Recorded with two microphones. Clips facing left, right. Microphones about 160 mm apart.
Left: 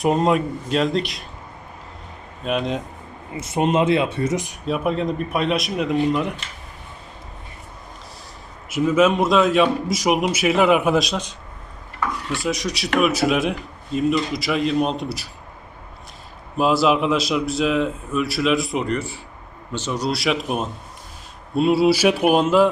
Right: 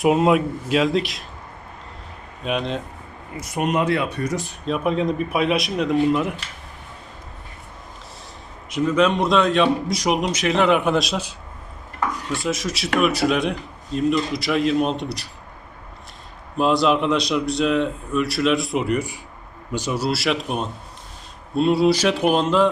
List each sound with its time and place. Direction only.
0.0 s speech: 5° right (ahead or behind)
2.4 s speech: centre (ahead or behind)
3.3 s speech: 25° left (ahead or behind)
4.6 s speech: 5° left (ahead or behind)
8.7 s speech: 5° left (ahead or behind)
12.4 s speech: centre (ahead or behind)
16.6 s speech: 5° left (ahead or behind)